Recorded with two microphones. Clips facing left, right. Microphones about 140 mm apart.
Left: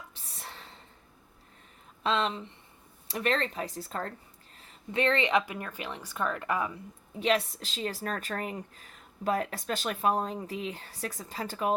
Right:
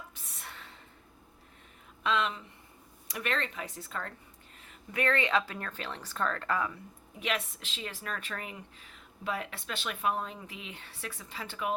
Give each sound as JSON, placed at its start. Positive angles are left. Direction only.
{"t": 0.1, "sound": "a sound", "side_deg": 30}
{"t": 2.0, "sound": "speech", "side_deg": 30}
{"t": 7.2, "sound": "speech", "side_deg": 35}